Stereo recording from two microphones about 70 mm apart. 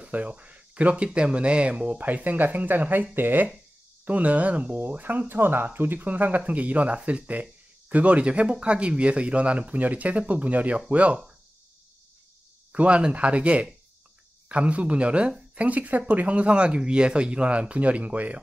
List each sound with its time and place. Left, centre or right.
0.0 s speech: right
12.7 s speech: centre